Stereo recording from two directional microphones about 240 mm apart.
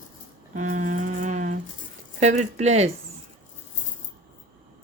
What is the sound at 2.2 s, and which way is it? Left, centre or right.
Speech, right.